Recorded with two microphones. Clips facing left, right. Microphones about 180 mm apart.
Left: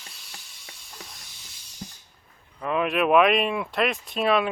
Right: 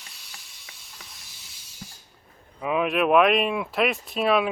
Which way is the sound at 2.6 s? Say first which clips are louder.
Right 1 dB; 5° right (ahead or behind).